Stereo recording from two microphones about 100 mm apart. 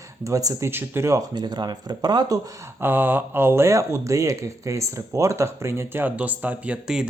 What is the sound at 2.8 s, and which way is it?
Speech, 20° right (ahead or behind).